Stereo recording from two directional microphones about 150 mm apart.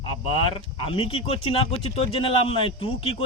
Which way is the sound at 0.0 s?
40° left (ahead or behind).